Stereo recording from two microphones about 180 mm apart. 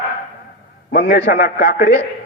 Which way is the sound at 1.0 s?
80° left.